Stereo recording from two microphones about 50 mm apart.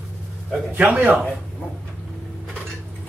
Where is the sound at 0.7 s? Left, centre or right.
Right.